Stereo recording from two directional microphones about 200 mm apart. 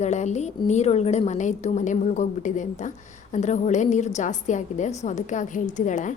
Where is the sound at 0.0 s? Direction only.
35° left (ahead or behind).